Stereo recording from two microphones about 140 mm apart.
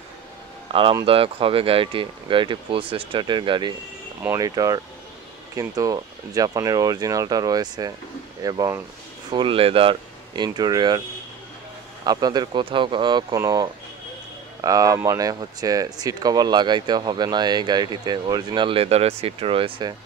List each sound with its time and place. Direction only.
0.7 s speech: 40° right (ahead or behind)
4.2 s speech: 20° right (ahead or behind)
9.3 s speech: 35° right (ahead or behind)
12.1 s speech: 30° right (ahead or behind)